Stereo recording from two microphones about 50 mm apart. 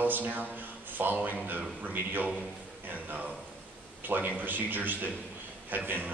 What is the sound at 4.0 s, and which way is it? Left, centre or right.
Speech, right.